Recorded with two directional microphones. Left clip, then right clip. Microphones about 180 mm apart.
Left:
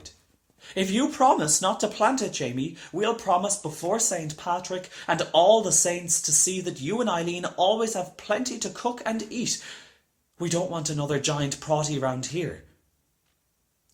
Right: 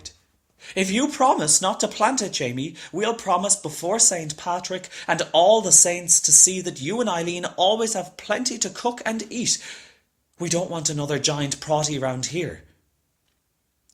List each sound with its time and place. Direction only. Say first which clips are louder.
0.6 s speech: right 3 dB; 25° right (ahead or behind)